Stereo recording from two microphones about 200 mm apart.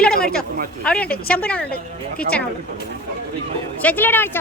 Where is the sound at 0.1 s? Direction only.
50° left (ahead or behind).